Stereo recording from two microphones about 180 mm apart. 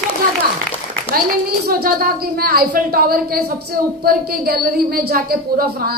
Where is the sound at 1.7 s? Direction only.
55° right (ahead or behind).